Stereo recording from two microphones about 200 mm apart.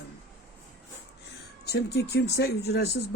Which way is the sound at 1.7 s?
55° left (ahead or behind).